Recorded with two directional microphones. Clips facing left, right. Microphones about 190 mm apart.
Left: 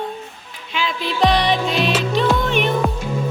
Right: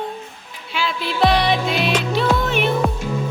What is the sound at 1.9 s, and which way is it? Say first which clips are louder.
Music: even; 5° right (ahead or behind).